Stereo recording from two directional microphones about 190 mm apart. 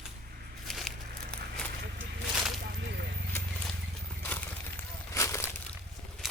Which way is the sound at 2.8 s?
60° right (ahead or behind).